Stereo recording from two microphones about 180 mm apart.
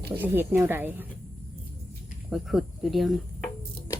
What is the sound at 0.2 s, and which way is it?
Speech, 10° right (ahead or behind).